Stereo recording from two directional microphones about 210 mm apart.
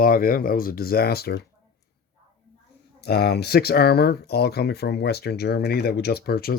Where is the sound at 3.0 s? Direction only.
50° left (ahead or behind).